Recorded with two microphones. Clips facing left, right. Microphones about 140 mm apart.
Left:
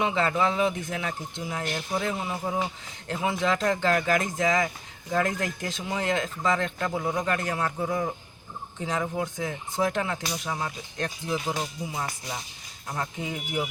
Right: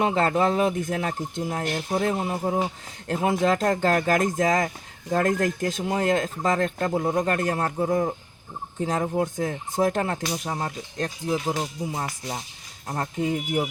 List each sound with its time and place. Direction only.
0.0 s speech: 45° right (ahead or behind)
8.8 s gobble: 40° right (ahead or behind)
12.9 s speech: 40° right (ahead or behind)